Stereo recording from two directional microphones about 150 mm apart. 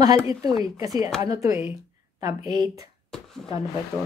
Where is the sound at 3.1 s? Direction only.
5° left (ahead or behind).